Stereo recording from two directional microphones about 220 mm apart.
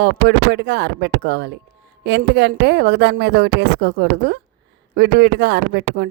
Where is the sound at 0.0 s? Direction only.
50° right (ahead or behind).